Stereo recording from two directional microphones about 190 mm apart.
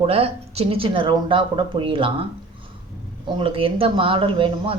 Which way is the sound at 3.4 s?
30° right (ahead or behind).